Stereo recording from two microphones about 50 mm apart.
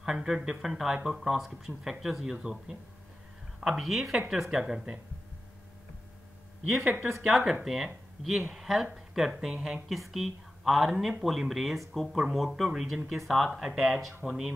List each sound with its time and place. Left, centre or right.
0.0 s speech: centre
6.8 s speech: right
7.2 s speech: centre